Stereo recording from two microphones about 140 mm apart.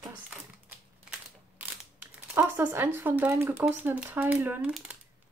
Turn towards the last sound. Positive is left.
turn(degrees=-10)  # may be behind; listen again after turning